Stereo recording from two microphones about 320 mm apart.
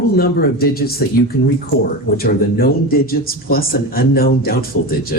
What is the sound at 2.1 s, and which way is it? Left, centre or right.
Speech, left.